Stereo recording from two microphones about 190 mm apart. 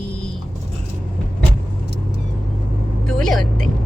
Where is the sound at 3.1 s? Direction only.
Centre (ahead or behind).